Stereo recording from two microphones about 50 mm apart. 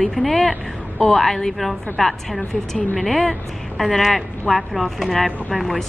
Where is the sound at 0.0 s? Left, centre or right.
Centre.